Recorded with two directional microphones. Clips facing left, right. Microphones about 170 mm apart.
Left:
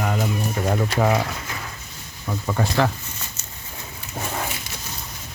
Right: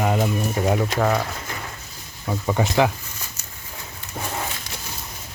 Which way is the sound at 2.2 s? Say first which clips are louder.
Right 2 dB; 15° right (ahead or behind).